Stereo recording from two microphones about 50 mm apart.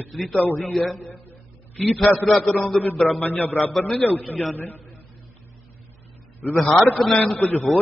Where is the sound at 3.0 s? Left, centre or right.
Left.